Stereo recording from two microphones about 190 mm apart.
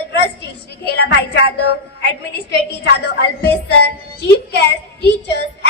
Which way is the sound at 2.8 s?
60° left (ahead or behind).